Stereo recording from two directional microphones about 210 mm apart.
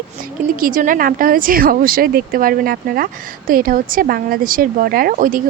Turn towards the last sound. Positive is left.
turn(degrees=-40)  # may be behind; listen again after turning